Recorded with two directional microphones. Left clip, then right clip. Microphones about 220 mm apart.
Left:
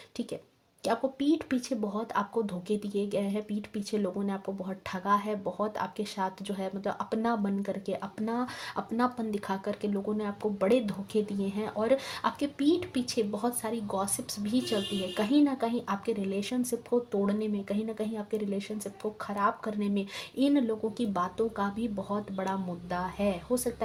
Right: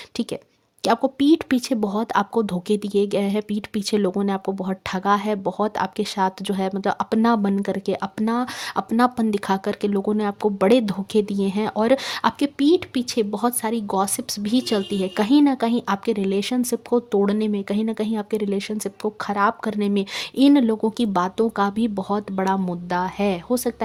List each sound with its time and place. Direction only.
0.9 s speech: 50° right (ahead or behind)